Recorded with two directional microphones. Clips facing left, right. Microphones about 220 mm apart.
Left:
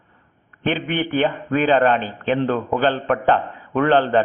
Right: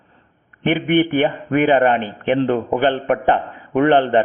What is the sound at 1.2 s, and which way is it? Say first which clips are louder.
A man's voice: right 3 dB; 15° right (ahead or behind).